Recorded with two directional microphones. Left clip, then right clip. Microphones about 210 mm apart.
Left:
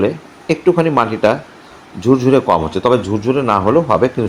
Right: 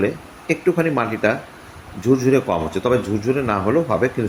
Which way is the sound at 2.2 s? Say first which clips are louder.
Left 6 dB; 5° left (ahead or behind).